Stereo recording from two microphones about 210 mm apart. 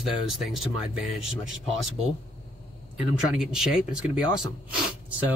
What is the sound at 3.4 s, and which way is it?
Speech, 5° right (ahead or behind).